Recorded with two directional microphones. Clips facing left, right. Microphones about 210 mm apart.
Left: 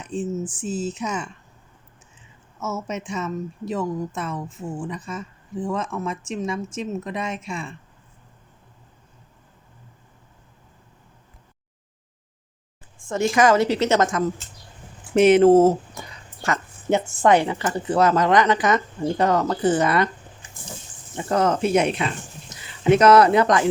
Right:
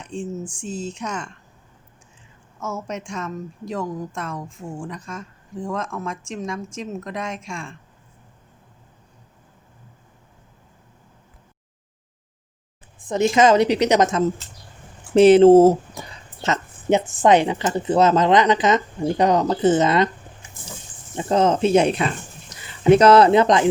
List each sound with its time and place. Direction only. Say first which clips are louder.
0.0 s a sound: left 3 dB; 5° left (ahead or behind)
0.5 s a woman's voice: left 3 dB; 5° left (ahead or behind)
2.6 s a woman's voice: left 1 dB; 5° left (ahead or behind)
13.1 s speech: right 2 dB; 20° right (ahead or behind)
15.1 s speech: right 3 dB; 30° right (ahead or behind)
21.2 s speech: right 3 dB; 20° right (ahead or behind)